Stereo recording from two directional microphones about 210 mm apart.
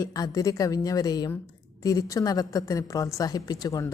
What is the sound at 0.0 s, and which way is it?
Speech, 15° left (ahead or behind).